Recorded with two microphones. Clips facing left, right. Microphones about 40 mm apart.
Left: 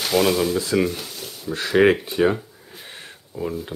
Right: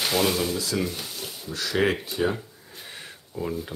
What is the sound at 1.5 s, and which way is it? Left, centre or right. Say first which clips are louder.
Speech: left 8 dB; left.